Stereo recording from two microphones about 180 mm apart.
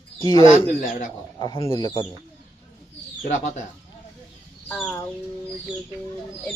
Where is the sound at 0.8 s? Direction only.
45° left (ahead or behind).